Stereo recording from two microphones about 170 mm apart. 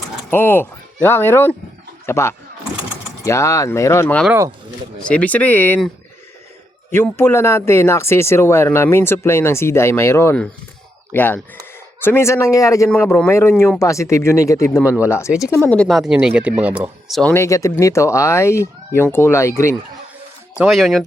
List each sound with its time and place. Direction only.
0.3 s speech: 15° left (ahead or behind)
4.3 s speech: 15° right (ahead or behind)
4.9 s speech: 5° left (ahead or behind)
6.9 s speech: 15° left (ahead or behind)
17.3 s speech: 15° left (ahead or behind)
20.6 s speech: centre (ahead or behind)